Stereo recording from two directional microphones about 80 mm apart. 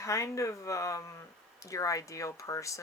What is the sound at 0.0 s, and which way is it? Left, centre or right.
Speech, left.